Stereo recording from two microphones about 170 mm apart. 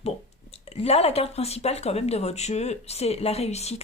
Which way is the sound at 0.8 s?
35° left (ahead or behind).